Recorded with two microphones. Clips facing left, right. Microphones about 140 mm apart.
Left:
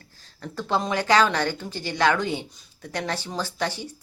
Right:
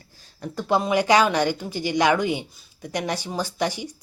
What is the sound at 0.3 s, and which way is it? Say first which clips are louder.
Speech: right 3 dB; 15° right (ahead or behind).